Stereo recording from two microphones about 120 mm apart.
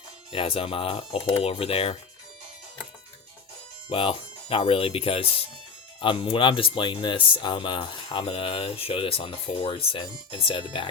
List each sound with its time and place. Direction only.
0.3 s speech: 50° left (ahead or behind)
3.8 s speech: 50° left (ahead or behind)